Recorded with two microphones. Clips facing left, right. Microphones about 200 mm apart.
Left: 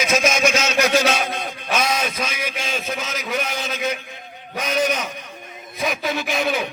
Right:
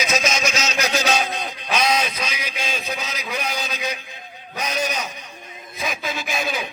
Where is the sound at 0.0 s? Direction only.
50° left (ahead or behind).